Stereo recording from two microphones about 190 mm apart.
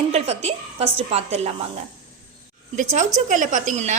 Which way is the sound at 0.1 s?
35° right (ahead or behind).